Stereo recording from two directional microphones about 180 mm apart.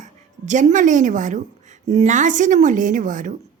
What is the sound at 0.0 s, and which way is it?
Speech, 40° right (ahead or behind).